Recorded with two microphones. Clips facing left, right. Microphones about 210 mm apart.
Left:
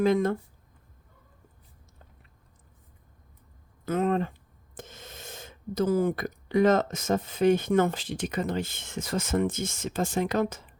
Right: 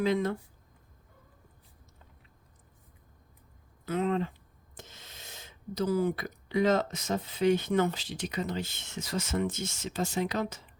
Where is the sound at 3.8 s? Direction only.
45° left (ahead or behind).